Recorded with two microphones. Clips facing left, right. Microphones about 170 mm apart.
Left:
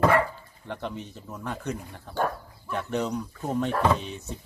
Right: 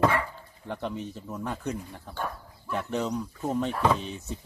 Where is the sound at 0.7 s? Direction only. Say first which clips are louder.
Right 1 dB; 5° right (ahead or behind).